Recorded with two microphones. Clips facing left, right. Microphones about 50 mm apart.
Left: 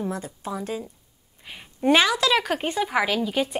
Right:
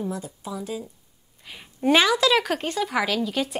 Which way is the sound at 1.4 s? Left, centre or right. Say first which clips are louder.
Left 1 dB; centre.